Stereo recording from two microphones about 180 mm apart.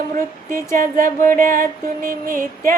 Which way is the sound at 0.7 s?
50° right (ahead or behind).